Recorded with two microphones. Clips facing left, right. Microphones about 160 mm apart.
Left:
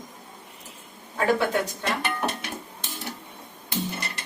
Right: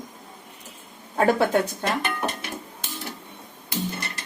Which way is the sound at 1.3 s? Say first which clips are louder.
Right 4 dB; 40° right (ahead or behind).